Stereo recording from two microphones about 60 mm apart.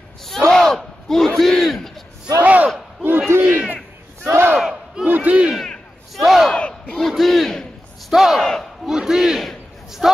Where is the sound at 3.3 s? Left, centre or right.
Right.